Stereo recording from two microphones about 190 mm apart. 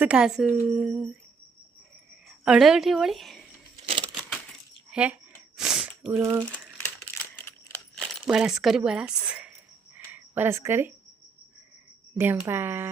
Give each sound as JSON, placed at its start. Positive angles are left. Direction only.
{"t": 0.0, "sound": "speech", "side_deg": -5}
{"t": 2.4, "sound": "speech", "side_deg": -5}
{"t": 3.8, "sound": "a sound", "side_deg": -25}
{"t": 4.9, "sound": "speech", "side_deg": -5}
{"t": 5.5, "sound": "sniff", "side_deg": -5}
{"t": 7.9, "sound": "speech", "side_deg": -5}
{"t": 12.1, "sound": "speech", "side_deg": -10}